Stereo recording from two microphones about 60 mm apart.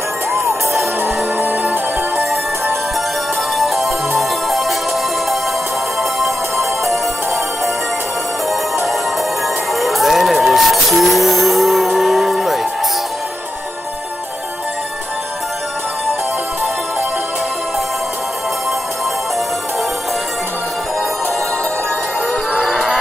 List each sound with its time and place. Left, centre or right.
0.3 s music: right
1.0 s music: right
3.5 s music: centre
6.1 s music: centre
9.8 s music: centre
22.5 s a sound: centre